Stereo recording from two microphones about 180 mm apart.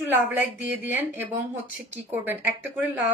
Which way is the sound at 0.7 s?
10° right (ahead or behind).